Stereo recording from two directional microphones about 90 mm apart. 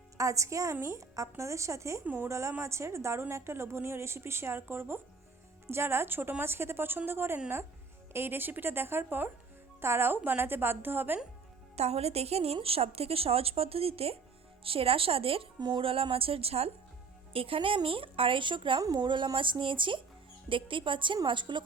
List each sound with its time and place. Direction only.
0.2 s a woman's voice: 35° right (ahead or behind)
12.4 s speech: 90° right
15.6 s speech: 75° right (ahead or behind)
18.8 s speech: 50° right (ahead or behind)